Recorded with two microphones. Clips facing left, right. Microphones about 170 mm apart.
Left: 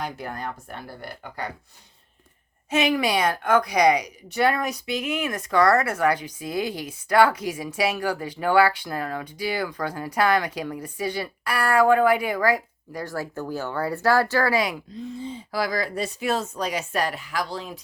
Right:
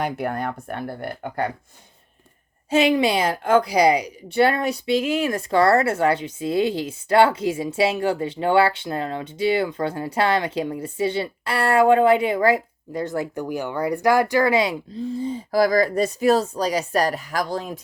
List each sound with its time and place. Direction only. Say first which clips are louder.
0.0 s speech: right 7 dB; 60° right (ahead or behind)
2.6 s a woman's voice: right 4 dB; 30° right (ahead or behind); by 17.7 s 45° right (ahead or behind)